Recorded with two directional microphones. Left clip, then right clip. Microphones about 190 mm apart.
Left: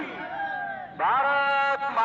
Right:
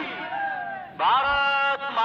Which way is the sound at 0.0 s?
45° left (ahead or behind).